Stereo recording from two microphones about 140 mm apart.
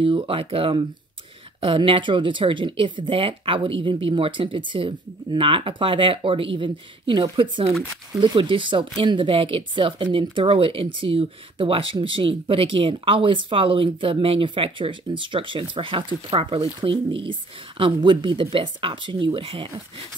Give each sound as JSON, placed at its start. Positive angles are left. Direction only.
{"t": 0.0, "sound": "speech", "side_deg": -40}